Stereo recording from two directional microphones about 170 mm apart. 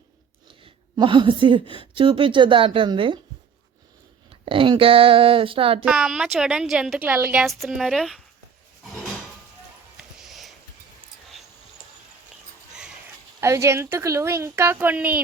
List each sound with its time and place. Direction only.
0.6 s a woman's voice: 30° right (ahead or behind)
4.3 s speech: 30° right (ahead or behind)
5.8 s a woman's voice: 5° right (ahead or behind)
10.0 s a sound: centre (ahead or behind)
13.4 s speech: 15° right (ahead or behind)